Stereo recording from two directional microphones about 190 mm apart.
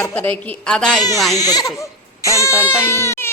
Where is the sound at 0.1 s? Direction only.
10° left (ahead or behind).